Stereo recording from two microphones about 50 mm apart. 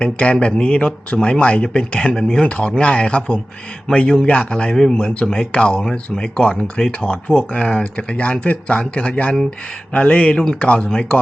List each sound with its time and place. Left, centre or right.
0.0 s speech: left
2.1 s speech: centre
2.4 s speech: left